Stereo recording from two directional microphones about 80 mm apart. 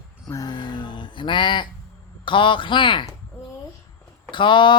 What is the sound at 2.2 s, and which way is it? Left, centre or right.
Speech, left.